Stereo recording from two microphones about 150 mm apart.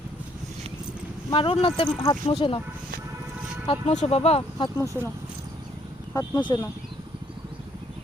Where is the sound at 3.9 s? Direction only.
45° left (ahead or behind).